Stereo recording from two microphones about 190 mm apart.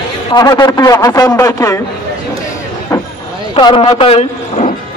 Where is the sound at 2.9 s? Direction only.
15° left (ahead or behind).